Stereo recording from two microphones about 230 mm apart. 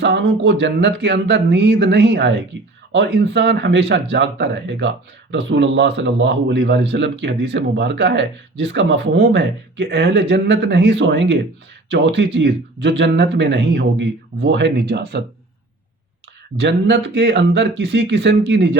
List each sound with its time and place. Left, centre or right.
0.0 s speech: right
16.6 s speech: right